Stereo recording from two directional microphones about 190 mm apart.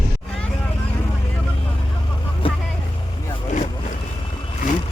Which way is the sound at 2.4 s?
30° left (ahead or behind).